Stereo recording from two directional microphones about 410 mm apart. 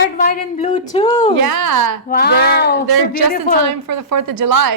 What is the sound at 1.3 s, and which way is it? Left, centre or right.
Speech, right.